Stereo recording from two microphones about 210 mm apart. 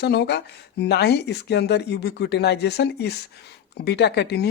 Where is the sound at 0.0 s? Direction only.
50° left (ahead or behind).